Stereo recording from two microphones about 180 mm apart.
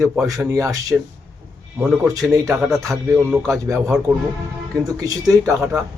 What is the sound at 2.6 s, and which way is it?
Speech, centre (ahead or behind).